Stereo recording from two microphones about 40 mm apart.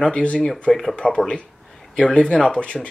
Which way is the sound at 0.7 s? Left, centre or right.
Centre.